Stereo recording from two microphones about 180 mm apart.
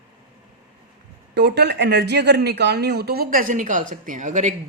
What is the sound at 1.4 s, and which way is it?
Speech, 65° right (ahead or behind).